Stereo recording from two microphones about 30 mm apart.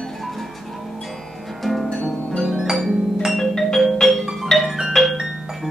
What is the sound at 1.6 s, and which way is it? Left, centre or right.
Music, centre.